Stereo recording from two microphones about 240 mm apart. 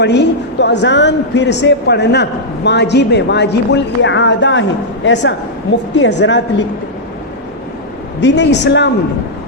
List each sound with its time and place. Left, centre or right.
0.0 s a woman's voice: left
8.2 s a woman's voice: left